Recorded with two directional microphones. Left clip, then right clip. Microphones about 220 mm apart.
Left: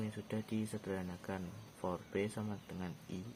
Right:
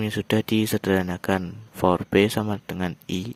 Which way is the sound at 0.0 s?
45° right (ahead or behind).